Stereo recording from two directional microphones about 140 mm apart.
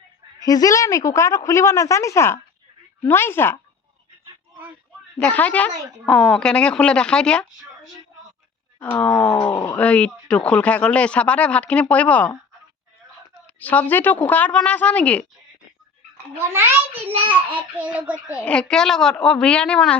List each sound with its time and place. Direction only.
0.3 s a woman's voice: 25° left (ahead or behind)
5.2 s speech: 10° left (ahead or behind)
8.8 s speech: 10° left (ahead or behind)
9.7 s speech: 10° left (ahead or behind)
13.6 s speech: 10° left (ahead or behind)
16.4 s a child's voice: 15° right (ahead or behind)
17.1 s a child's voice: 45° right (ahead or behind)
17.5 s a child's voice: 10° right (ahead or behind)
18.4 s speech: 5° left (ahead or behind)